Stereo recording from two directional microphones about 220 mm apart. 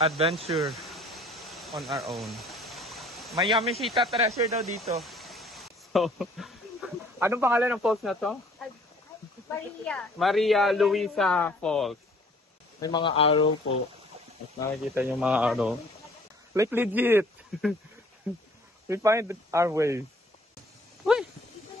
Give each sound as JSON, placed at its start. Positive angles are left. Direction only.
{"t": 0.2, "sound": "speech", "side_deg": -25}
{"t": 0.6, "sound": "a sound", "side_deg": 0}
{"t": 3.4, "sound": "speech", "side_deg": 0}
{"t": 4.3, "sound": "a sound", "side_deg": 0}
{"t": 7.2, "sound": "speech", "side_deg": -10}
{"t": 9.8, "sound": "speech", "side_deg": 0}
{"t": 12.8, "sound": "speech", "side_deg": 20}
{"t": 15.0, "sound": "speech", "side_deg": -5}
{"t": 16.5, "sound": "speech", "side_deg": -10}
{"t": 18.9, "sound": "speech", "side_deg": -15}
{"t": 21.0, "sound": "a sound", "side_deg": 0}